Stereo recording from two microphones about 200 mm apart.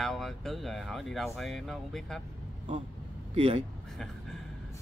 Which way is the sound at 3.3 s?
30° right (ahead or behind).